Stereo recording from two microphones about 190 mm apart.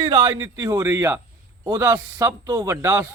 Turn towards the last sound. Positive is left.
turn(degrees=-15)  # may be behind; listen again after turning